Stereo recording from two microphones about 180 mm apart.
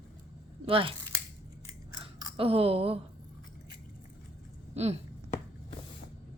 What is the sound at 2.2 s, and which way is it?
Speech, 30° right (ahead or behind).